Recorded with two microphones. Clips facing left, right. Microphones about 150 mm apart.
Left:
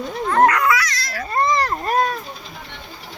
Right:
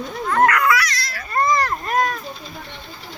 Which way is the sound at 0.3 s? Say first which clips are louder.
Left 1 dB; 25° left (ahead or behind).